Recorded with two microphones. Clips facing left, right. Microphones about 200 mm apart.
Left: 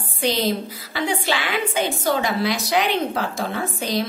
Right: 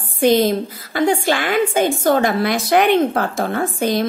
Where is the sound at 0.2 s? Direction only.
50° right (ahead or behind).